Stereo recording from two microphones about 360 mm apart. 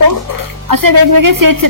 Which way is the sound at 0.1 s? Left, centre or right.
Right.